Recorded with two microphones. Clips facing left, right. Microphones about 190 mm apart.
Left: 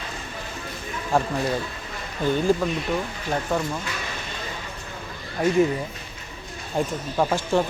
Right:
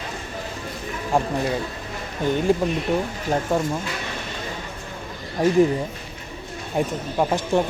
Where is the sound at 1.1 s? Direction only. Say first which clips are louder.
Right 1 dB; 15° right (ahead or behind).